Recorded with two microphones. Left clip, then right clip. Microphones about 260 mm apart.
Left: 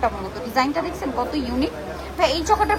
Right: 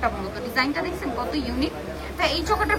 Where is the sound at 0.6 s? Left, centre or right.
Centre.